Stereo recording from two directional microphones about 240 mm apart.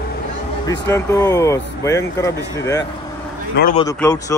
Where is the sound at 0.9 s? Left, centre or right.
Centre.